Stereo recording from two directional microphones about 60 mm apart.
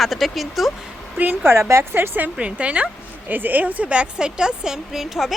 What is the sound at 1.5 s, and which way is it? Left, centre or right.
Speech, right.